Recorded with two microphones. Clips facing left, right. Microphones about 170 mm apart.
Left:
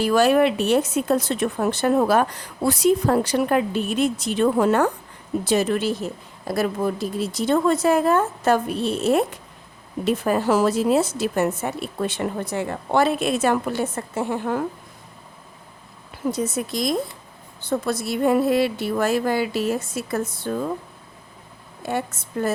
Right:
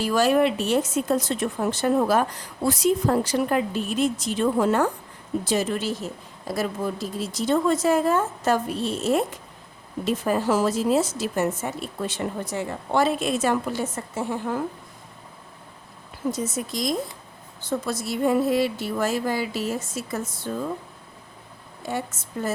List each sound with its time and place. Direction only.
0.0 s speech: 65° left (ahead or behind)
16.3 s speech: 60° left (ahead or behind)
21.8 s speech: 60° left (ahead or behind)